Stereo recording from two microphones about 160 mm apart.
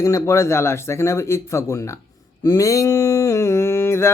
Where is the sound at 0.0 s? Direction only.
15° left (ahead or behind).